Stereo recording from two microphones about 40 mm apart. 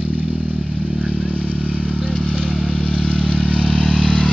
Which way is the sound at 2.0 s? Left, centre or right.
Centre.